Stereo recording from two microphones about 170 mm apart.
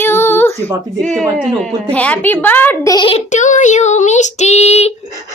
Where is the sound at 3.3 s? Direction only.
45° left (ahead or behind).